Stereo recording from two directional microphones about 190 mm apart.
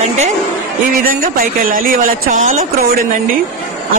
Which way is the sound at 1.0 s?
50° right (ahead or behind).